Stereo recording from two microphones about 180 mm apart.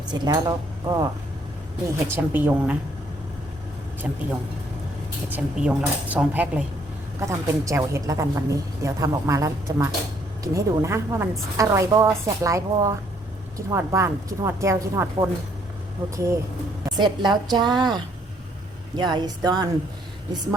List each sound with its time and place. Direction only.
0.1 s a woman's voice: 20° right (ahead or behind)
2.1 s a woman's voice: 10° right (ahead or behind)
4.0 s a woman's voice: 5° right (ahead or behind)
5.3 s a woman's voice: 10° right (ahead or behind)